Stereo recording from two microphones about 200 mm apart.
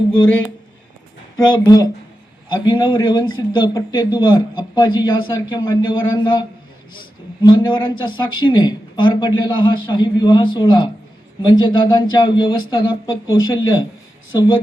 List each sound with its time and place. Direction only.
1.4 s a man's voice: 20° left (ahead or behind)
7.4 s a man's voice: 25° left (ahead or behind)